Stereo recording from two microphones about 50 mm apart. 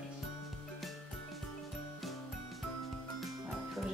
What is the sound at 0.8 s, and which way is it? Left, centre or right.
Music, centre.